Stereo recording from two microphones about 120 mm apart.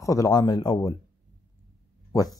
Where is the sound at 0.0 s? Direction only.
25° left (ahead or behind).